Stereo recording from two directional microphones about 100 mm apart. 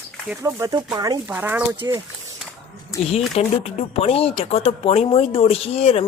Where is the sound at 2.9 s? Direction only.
35° left (ahead or behind).